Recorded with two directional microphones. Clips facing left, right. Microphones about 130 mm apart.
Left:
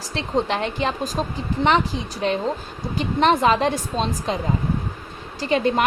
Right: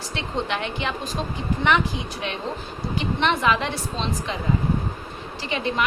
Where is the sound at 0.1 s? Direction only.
35° left (ahead or behind).